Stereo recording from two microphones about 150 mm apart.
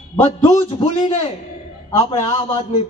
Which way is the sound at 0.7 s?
35° left (ahead or behind).